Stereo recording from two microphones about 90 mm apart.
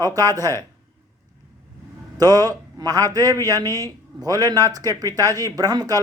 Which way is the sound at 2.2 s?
45° right (ahead or behind).